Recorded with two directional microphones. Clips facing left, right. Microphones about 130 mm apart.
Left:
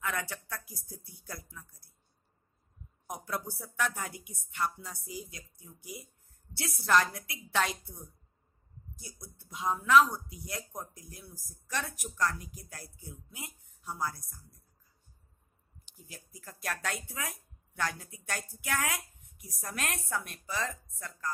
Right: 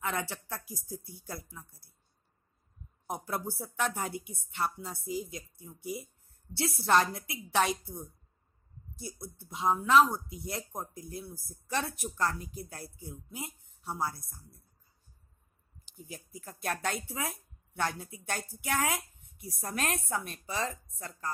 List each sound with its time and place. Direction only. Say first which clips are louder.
0.0 s speech: right 2 dB; 25° right (ahead or behind)
3.1 s speech: right 2 dB; 25° right (ahead or behind)
16.6 s speech: right 3 dB; 25° right (ahead or behind)